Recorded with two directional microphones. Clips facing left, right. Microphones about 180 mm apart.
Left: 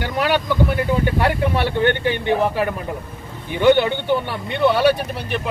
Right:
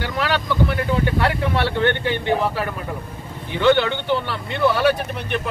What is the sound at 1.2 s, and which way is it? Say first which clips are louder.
Speech: left 2 dB; 15° left (ahead or behind).